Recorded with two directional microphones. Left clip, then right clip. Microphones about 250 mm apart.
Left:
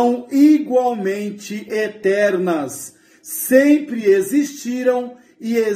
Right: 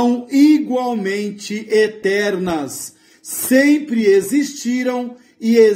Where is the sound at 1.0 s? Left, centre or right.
Right.